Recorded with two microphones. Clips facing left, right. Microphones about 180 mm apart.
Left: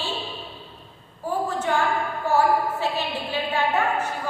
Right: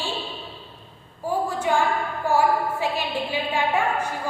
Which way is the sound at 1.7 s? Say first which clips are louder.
Right 2 dB; 15° right (ahead or behind).